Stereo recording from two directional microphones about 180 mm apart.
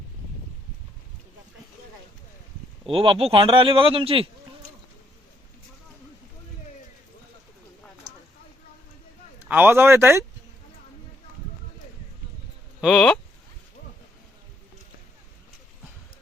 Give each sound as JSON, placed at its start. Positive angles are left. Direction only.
{"t": 2.8, "sound": "speech", "side_deg": -30}
{"t": 9.4, "sound": "speech", "side_deg": -10}
{"t": 12.8, "sound": "speech", "side_deg": 0}